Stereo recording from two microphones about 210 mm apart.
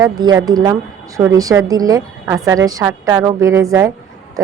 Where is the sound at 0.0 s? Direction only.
20° right (ahead or behind).